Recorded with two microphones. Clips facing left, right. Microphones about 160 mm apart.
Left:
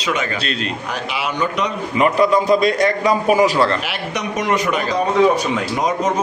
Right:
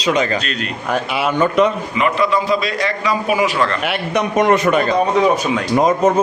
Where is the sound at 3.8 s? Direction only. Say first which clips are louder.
Right 5 dB; 55° right (ahead or behind).